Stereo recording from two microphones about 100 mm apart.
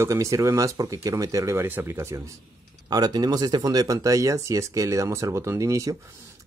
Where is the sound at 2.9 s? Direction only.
40° right (ahead or behind).